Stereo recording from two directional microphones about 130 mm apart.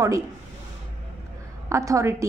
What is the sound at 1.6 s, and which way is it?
Speech, 25° right (ahead or behind).